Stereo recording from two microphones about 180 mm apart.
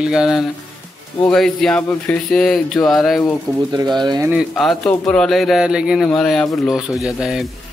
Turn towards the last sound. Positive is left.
turn(degrees=0)  # may be behind; listen again after turning